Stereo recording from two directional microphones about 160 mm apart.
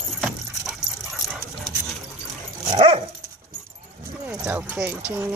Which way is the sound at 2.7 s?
35° right (ahead or behind).